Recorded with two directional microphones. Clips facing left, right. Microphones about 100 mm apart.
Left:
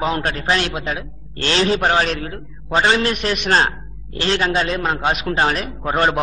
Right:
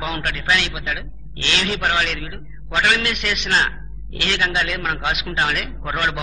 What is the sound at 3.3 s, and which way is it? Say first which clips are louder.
Speech: left 3 dB; 50° left (ahead or behind).